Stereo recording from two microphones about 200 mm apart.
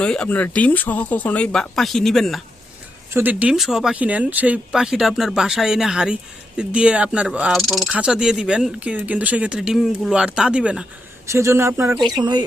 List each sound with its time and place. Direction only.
0.0 s speech: 5° left (ahead or behind)
3.1 s speech: 10° right (ahead or behind)